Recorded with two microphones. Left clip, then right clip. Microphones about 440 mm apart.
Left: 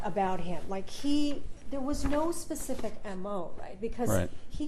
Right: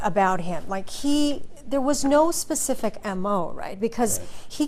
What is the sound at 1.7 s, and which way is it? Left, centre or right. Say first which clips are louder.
Speech: right 12 dB; right.